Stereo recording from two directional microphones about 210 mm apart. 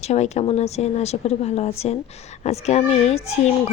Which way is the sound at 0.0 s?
30° left (ahead or behind).